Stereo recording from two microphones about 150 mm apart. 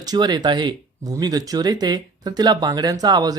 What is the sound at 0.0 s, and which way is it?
Speech, 25° right (ahead or behind).